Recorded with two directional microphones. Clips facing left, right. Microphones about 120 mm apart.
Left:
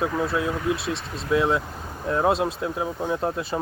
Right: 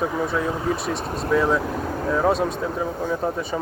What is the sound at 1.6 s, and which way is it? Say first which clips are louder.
Speech: right 9 dB; 90° right.